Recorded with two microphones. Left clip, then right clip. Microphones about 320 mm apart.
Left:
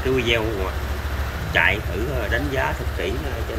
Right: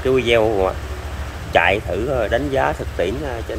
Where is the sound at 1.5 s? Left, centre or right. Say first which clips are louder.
Right 4 dB; centre.